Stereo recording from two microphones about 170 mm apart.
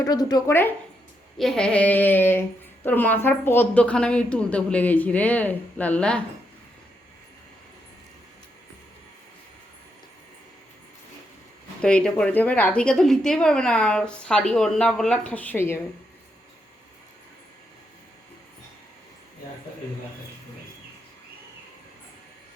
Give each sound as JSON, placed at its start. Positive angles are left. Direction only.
{"t": 0.0, "sound": "speech", "side_deg": 25}
{"t": 1.4, "sound": "a woman's voice", "side_deg": 5}
{"t": 11.8, "sound": "a woman's voice", "side_deg": 5}